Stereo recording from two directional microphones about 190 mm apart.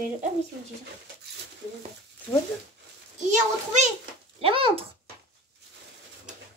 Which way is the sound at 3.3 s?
40° right (ahead or behind).